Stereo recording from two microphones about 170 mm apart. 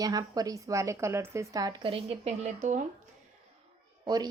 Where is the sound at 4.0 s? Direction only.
25° right (ahead or behind).